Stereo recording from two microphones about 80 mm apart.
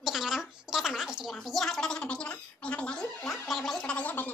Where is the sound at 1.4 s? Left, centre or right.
Centre.